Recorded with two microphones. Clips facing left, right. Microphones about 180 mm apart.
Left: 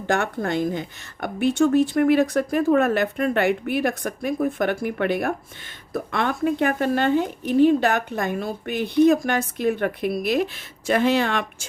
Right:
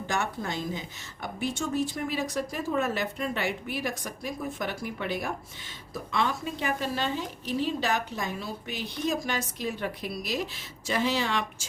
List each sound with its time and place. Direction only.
0.1 s a woman's voice: 60° left (ahead or behind)